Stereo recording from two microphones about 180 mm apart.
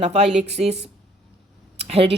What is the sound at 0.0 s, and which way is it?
Speech, 35° right (ahead or behind).